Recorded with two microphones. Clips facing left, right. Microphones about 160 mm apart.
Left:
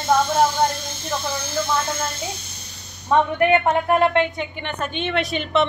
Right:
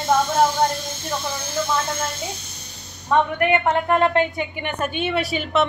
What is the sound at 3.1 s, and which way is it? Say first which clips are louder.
Speech: left 2 dB; 20° left (ahead or behind).